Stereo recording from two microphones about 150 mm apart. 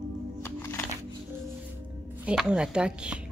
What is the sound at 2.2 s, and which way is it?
Speech, 5° right (ahead or behind).